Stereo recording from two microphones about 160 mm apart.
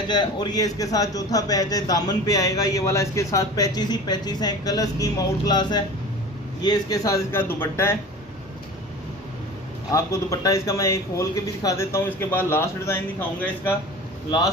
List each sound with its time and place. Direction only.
0.1 s a man's voice: 25° left (ahead or behind)
9.8 s a man's voice: 20° left (ahead or behind)